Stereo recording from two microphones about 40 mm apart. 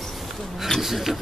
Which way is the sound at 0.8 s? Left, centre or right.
Centre.